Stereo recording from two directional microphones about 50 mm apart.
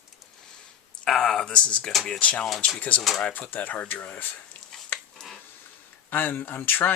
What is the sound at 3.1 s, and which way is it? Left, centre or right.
Speech, left.